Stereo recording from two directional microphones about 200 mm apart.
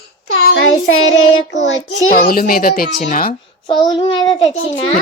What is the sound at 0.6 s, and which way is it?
Child singing, 90° left.